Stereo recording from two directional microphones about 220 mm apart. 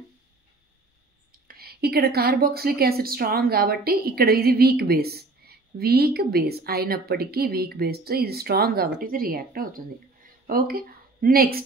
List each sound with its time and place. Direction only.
1.5 s a woman's voice: 45° right (ahead or behind)